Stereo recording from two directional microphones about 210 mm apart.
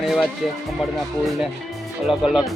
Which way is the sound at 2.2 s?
5° right (ahead or behind).